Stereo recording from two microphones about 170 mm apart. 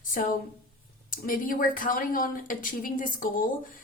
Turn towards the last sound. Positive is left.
turn(degrees=55)  # may be behind; listen again after turning